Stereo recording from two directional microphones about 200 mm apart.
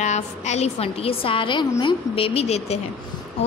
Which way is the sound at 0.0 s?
35° left (ahead or behind).